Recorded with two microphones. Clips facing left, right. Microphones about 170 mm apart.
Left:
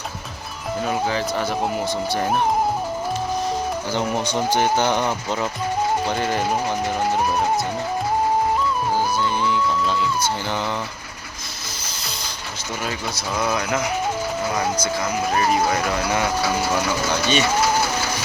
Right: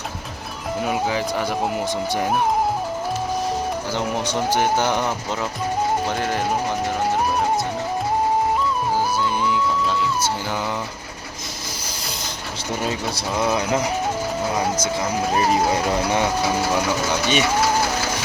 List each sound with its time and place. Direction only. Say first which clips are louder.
0.8 s speech: even; 10° right (ahead or behind)
3.9 s speech: left 2 dB; centre (ahead or behind)
9.4 s music: even; 5° right (ahead or behind)
12.8 s speech: right 2 dB; 30° right (ahead or behind)
15.4 s speech: right 1 dB; 25° right (ahead or behind)